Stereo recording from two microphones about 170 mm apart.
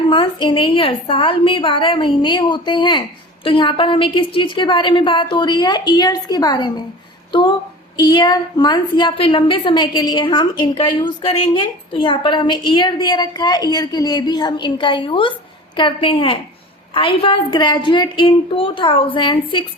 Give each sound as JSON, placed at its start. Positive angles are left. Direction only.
{"t": 0.1, "sound": "a woman's voice", "side_deg": 30}
{"t": 7.9, "sound": "a woman's voice", "side_deg": 25}